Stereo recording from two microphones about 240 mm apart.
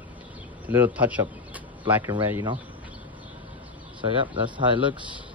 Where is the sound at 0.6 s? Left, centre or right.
Centre.